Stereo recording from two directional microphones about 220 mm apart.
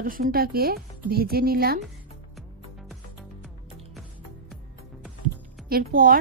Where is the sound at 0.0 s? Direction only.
40° right (ahead or behind).